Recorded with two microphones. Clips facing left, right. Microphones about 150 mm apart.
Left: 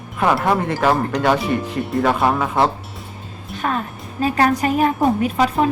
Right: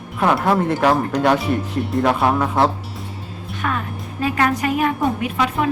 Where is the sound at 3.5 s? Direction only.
35° left (ahead or behind).